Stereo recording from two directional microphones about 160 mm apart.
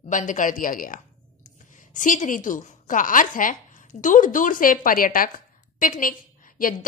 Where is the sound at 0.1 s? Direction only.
55° left (ahead or behind).